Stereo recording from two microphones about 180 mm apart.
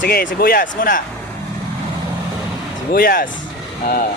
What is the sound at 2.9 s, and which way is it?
Speech, 55° left (ahead or behind).